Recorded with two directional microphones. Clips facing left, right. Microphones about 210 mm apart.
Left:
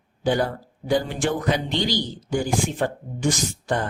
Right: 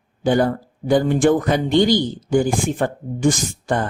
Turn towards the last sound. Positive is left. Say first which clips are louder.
# right 3 dB
turn(degrees=-50)  # may be behind; listen again after turning